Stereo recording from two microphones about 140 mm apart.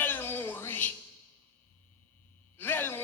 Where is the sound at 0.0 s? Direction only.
15° left (ahead or behind).